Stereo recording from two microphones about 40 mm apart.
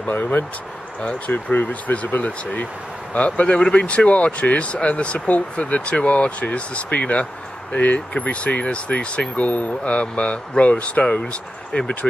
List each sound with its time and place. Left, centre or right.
0.1 s speech: left
3.2 s speech: left
3.4 s speech: left